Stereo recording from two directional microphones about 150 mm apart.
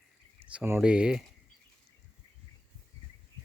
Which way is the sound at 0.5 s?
10° right (ahead or behind).